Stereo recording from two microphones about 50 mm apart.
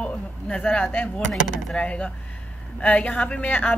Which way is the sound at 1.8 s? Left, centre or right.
Left.